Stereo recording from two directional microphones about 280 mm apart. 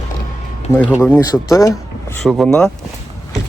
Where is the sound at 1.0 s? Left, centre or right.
Centre.